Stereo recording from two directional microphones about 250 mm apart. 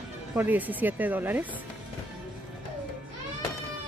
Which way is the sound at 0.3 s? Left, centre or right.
Centre.